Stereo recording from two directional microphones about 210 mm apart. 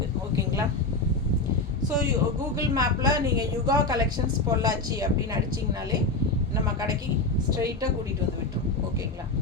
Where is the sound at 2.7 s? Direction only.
20° right (ahead or behind).